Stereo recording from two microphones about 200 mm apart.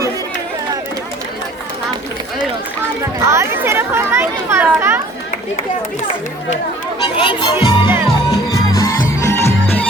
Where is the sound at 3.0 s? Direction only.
15° right (ahead or behind).